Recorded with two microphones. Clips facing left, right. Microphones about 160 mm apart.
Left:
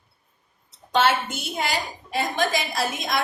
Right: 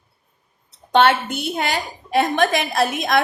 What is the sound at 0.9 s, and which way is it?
A woman's voice, 60° right (ahead or behind).